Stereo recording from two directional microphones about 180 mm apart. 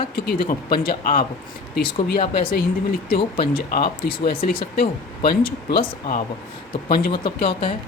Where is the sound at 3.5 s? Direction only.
60° left (ahead or behind).